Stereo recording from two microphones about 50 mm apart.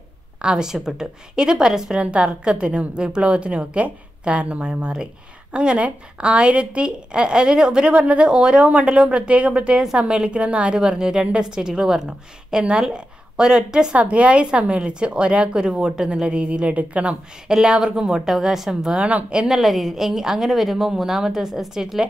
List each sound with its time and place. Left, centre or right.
0.4 s a woman's voice: centre
17.5 s a woman's voice: centre